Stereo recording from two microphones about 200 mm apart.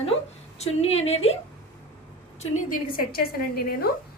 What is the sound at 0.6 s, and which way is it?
Speech, 30° left (ahead or behind).